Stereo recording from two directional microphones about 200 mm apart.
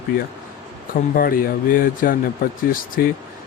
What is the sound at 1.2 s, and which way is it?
Speech, 45° left (ahead or behind).